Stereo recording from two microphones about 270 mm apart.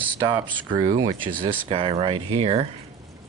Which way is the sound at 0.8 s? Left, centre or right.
Right.